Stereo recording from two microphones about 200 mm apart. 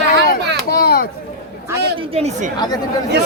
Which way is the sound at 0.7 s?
50° left (ahead or behind).